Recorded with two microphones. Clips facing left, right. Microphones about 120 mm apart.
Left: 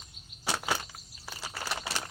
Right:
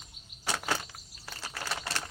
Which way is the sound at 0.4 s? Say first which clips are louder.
Left 1 dB; 5° left (ahead or behind).